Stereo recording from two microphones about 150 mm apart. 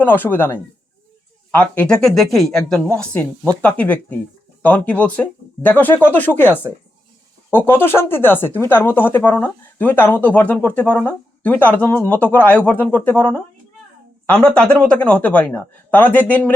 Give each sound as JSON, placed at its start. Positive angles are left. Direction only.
{"t": 0.0, "sound": "speech", "side_deg": 15}